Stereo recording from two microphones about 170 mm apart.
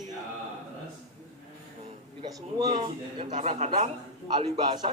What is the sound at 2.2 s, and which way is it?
Speech, 25° right (ahead or behind).